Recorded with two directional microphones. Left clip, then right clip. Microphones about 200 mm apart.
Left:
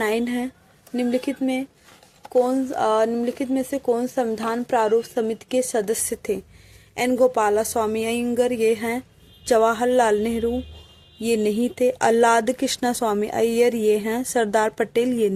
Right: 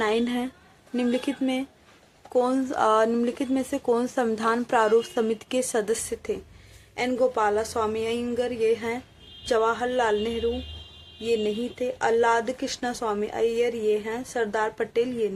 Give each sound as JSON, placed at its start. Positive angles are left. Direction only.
{"t": 0.0, "sound": "speech", "side_deg": 35}